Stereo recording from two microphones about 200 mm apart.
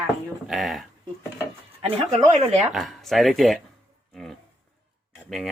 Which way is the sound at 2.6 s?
Centre (ahead or behind).